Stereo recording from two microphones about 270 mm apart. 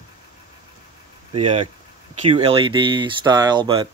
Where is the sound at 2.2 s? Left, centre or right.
Centre.